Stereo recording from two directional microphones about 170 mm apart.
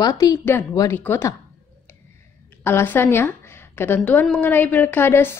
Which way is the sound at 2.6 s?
15° left (ahead or behind).